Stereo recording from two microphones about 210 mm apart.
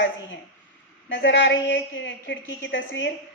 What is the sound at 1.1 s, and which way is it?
A woman's voice, 60° left (ahead or behind).